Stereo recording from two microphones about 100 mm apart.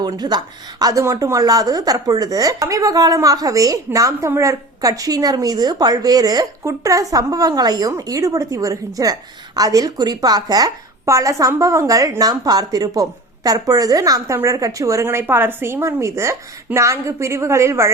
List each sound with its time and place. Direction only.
0.0 s a woman's voice: 45° right (ahead or behind); by 17.9 s 30° right (ahead or behind)